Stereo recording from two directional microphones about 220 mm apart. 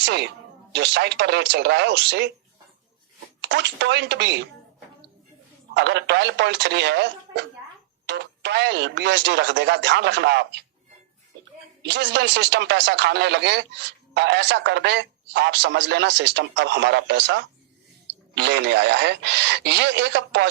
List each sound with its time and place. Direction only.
0.0 s speech: 50° right (ahead or behind)
3.4 s speech: 55° right (ahead or behind)
5.7 s speech: 50° right (ahead or behind)
11.8 s speech: 55° right (ahead or behind)